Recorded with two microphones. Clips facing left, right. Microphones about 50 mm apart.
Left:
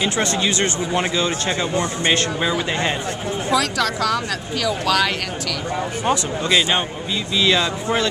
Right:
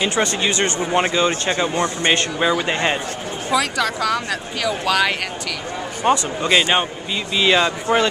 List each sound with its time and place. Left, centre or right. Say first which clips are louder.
0.1 s speech: right 1 dB; right
3.5 s speech: right 1 dB; centre; by 8.1 s right